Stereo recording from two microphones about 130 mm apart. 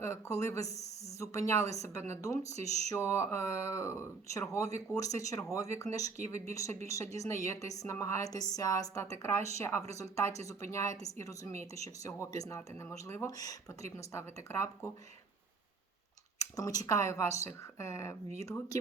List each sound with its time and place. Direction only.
0.0 s a woman's voice: 25° left (ahead or behind)
16.4 s a woman's voice: 30° left (ahead or behind)